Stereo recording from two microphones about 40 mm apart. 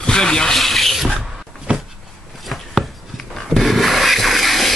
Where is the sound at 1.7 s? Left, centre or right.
Right.